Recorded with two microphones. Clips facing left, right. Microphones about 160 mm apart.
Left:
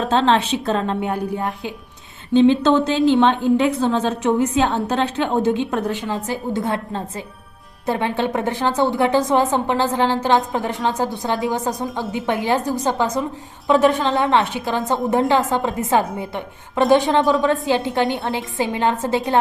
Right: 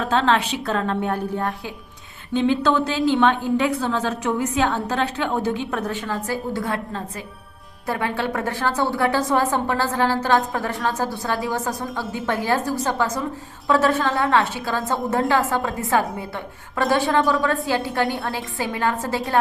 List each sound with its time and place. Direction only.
0.0 s a woman's voice: 25° left (ahead or behind)